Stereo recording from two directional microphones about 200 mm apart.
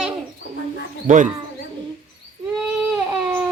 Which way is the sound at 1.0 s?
40° right (ahead or behind).